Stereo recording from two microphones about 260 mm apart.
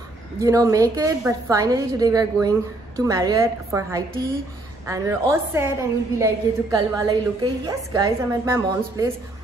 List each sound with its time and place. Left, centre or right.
0.4 s a woman's voice: centre